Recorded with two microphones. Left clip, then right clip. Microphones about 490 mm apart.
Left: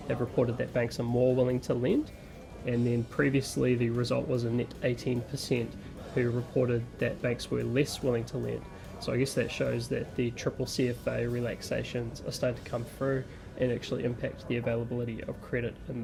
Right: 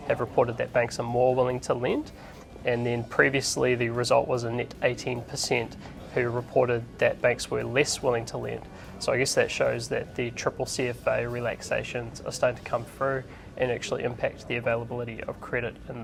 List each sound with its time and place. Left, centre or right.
0.1 s speech: right